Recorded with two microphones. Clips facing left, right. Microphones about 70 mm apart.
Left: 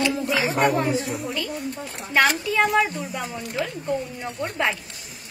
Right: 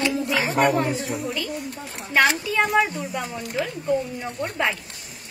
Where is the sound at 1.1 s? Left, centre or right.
Centre.